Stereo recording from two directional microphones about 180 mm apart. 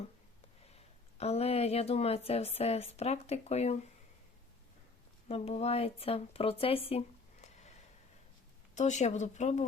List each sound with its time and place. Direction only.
0.8 s speech: 35° left (ahead or behind)
5.3 s speech: 35° left (ahead or behind)
8.7 s speech: 40° left (ahead or behind)